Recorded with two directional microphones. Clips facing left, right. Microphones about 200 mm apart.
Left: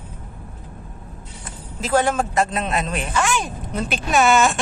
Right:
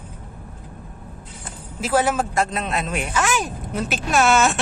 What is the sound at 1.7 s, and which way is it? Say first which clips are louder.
Speech: left 1 dB; 10° right (ahead or behind).